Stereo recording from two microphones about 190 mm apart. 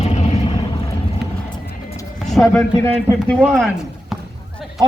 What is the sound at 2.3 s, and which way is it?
Speech, centre (ahead or behind).